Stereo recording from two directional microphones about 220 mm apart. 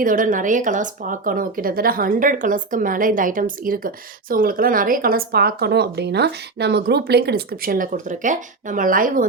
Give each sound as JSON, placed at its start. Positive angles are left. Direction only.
{"t": 0.0, "sound": "speech", "side_deg": -40}